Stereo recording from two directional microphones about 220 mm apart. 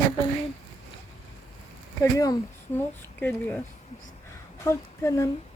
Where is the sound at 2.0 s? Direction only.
15° left (ahead or behind).